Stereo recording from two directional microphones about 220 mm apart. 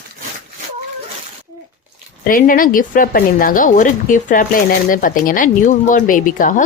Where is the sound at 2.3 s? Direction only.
40° left (ahead or behind).